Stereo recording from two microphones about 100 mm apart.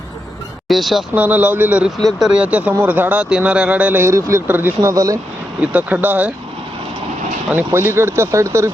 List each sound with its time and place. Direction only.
0.7 s speech: centre (ahead or behind)
1.1 s speech: 15° right (ahead or behind)
4.0 s speech: 30° right (ahead or behind)
4.4 s speech: 20° right (ahead or behind); by 5.2 s 35° right (ahead or behind)
5.5 s speech: 15° right (ahead or behind)
7.5 s speech: 25° right (ahead or behind)